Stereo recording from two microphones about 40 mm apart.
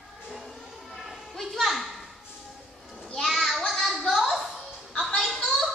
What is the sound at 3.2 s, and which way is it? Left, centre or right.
Children playing, centre.